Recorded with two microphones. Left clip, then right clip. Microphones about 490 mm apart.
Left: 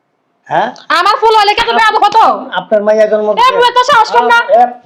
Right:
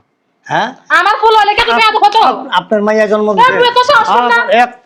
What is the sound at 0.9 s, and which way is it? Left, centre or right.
A woman's voice, left.